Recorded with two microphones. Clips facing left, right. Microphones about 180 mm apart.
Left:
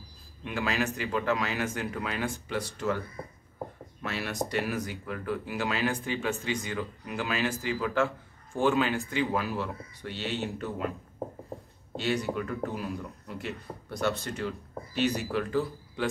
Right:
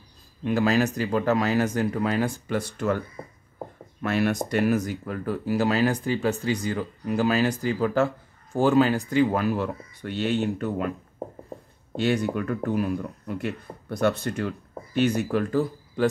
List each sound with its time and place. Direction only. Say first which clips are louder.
0.4 s speech: right 8 dB; 40° right (ahead or behind)
4.0 s speech: right 9 dB; 50° right (ahead or behind)
12.0 s speech: right 5 dB; 55° right (ahead or behind)